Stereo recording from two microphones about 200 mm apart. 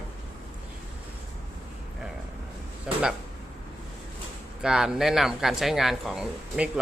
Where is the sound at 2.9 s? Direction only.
5° right (ahead or behind).